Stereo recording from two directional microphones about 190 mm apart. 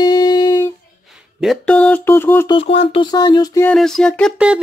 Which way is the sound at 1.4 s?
5° left (ahead or behind).